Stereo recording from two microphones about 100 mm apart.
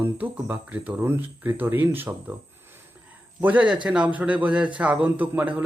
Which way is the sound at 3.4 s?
15° right (ahead or behind).